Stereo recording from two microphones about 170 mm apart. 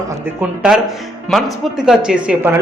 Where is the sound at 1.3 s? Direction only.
Centre (ahead or behind).